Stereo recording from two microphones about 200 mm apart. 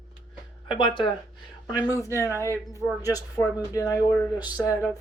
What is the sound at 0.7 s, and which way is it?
Speech, 25° left (ahead or behind).